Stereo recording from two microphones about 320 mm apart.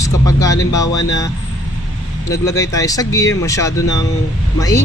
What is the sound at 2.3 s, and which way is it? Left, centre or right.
Speech, centre.